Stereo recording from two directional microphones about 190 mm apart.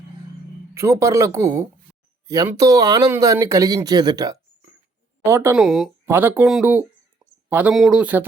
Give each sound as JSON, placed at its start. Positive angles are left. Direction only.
{"t": 0.7, "sound": "speech", "side_deg": -15}
{"t": 5.6, "sound": "speech", "side_deg": 0}